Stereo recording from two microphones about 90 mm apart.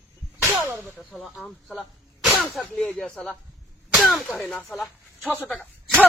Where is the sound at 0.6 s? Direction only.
25° right (ahead or behind).